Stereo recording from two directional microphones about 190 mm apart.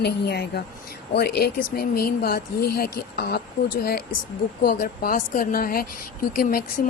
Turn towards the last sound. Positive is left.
turn(degrees=50)  # may be behind; listen again after turning